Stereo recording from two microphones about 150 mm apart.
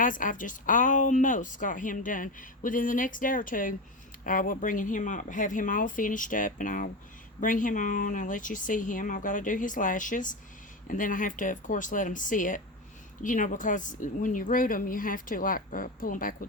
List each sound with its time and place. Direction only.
0.0 s a woman's voice: 65° left (ahead or behind)